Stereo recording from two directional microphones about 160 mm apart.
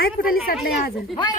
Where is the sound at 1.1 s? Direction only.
30° left (ahead or behind).